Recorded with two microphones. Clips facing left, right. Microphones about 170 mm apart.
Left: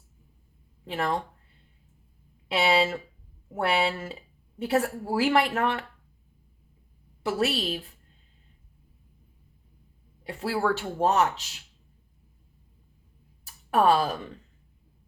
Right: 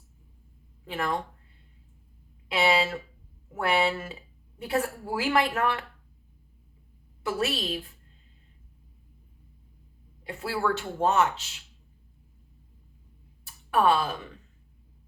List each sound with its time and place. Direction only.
0.9 s speech: 30° left (ahead or behind)
2.5 s speech: 30° left (ahead or behind)
7.2 s speech: 30° left (ahead or behind)
10.2 s speech: 35° left (ahead or behind)
13.4 s a sound: 40° left (ahead or behind)